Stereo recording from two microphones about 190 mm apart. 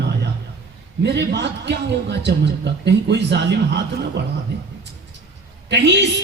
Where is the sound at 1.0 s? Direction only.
65° right (ahead or behind).